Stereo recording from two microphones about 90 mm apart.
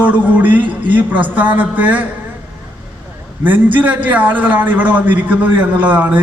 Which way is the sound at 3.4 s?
20° right (ahead or behind).